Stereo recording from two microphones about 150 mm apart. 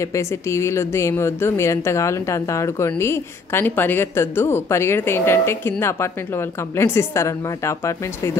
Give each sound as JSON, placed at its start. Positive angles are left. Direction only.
{"t": 0.0, "sound": "a woman's voice", "side_deg": 20}